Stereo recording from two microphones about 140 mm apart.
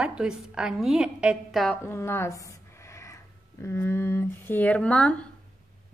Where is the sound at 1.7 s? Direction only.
15° left (ahead or behind).